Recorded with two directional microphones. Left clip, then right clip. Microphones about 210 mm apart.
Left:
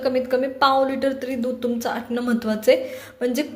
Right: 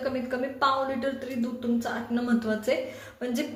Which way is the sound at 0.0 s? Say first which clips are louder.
Left 9 dB; 40° left (ahead or behind).